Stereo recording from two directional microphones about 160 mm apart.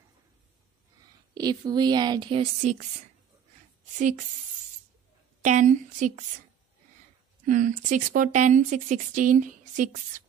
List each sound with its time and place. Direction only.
1.3 s a woman's voice: 25° right (ahead or behind)
2.6 s speech: 45° right (ahead or behind)
5.4 s speech: 50° right (ahead or behind)
7.4 s speech: 55° right (ahead or behind)